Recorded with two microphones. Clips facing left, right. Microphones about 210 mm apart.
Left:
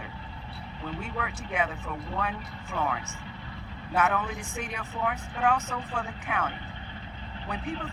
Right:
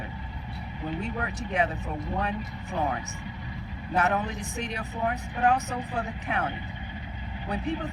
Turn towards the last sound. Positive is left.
turn(degrees=-40)  # may be behind; listen again after turning